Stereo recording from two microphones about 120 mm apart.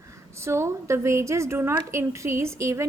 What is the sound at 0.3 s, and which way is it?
A woman's voice, 25° right (ahead or behind).